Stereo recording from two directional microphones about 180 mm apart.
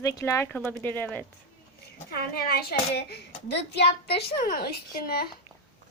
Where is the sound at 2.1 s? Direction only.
60° left (ahead or behind).